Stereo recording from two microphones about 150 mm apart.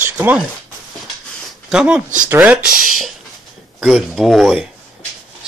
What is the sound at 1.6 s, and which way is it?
Speech, 5° right (ahead or behind).